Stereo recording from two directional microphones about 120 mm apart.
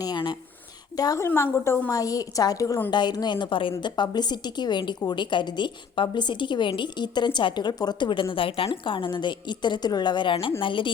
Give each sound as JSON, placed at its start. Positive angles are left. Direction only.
{"t": 0.0, "sound": "a woman's voice", "side_deg": 35}
{"t": 1.9, "sound": "a woman's voice", "side_deg": 30}